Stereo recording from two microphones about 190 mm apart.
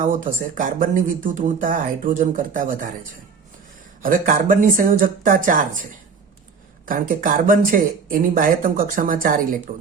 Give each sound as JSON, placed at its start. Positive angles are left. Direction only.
{"t": 0.0, "sound": "speech", "side_deg": -45}
{"t": 4.0, "sound": "speech", "side_deg": -45}
{"t": 6.8, "sound": "speech", "side_deg": -45}